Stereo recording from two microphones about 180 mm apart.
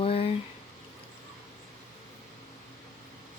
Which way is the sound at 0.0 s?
35° left (ahead or behind).